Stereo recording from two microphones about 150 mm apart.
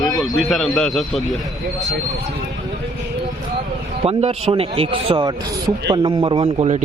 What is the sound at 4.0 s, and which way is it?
A man's voice, 40° right (ahead or behind).